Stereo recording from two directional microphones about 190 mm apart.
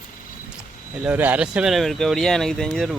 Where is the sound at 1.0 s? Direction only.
10° right (ahead or behind).